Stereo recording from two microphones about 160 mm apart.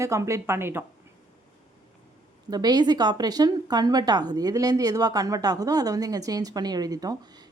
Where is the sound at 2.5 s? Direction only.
25° right (ahead or behind).